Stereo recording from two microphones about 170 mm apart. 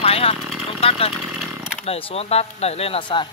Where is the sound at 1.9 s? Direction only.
40° left (ahead or behind).